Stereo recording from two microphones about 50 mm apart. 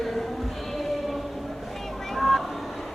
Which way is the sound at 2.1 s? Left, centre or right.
Centre.